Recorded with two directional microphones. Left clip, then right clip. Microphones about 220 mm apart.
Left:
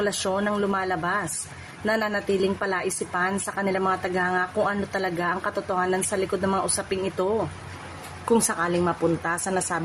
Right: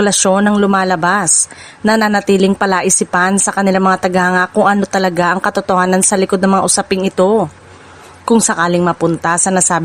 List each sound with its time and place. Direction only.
0.0 s speech: 45° right (ahead or behind)